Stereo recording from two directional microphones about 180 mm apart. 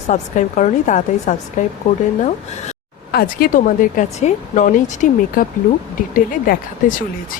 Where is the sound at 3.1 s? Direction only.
55° left (ahead or behind).